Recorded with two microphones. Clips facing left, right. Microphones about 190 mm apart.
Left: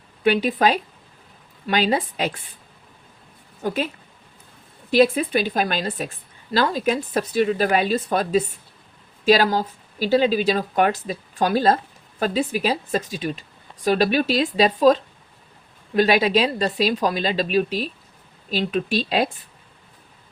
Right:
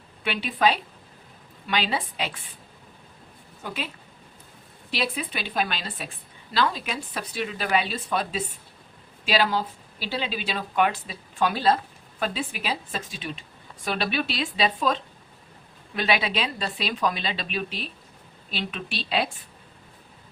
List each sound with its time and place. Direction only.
0.3 s speech: 45° left (ahead or behind)
3.6 s speech: 45° left (ahead or behind)
4.9 s speech: 45° left (ahead or behind)